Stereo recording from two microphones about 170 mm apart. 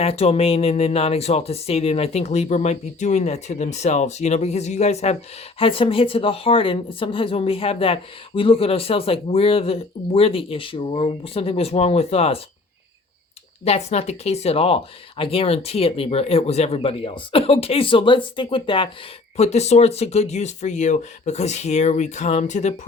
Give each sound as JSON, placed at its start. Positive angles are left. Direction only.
{"t": 0.0, "sound": "speech", "side_deg": 35}
{"t": 13.7, "sound": "speech", "side_deg": 40}
{"t": 19.4, "sound": "speech", "side_deg": 40}